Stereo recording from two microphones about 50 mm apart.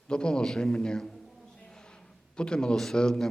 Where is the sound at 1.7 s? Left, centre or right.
Centre.